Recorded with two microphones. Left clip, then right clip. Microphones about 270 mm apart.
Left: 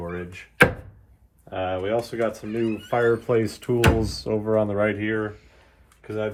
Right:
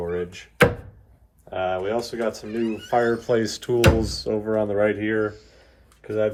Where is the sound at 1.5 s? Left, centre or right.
Left.